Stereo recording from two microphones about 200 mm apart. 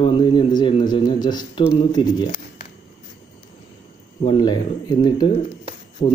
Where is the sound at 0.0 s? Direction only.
25° left (ahead or behind).